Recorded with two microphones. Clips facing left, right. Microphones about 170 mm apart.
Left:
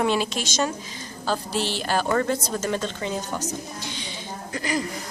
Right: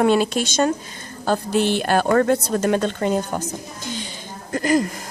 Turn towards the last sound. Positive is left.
turn(degrees=-50)  # may be behind; listen again after turning